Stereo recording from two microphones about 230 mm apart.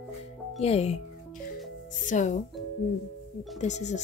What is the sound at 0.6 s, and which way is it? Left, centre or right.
Speech, left.